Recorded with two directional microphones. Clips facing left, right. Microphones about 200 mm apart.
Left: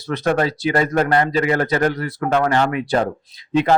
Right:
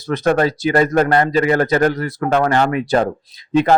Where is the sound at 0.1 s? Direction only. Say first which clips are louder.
Right 3 dB; 45° right (ahead or behind).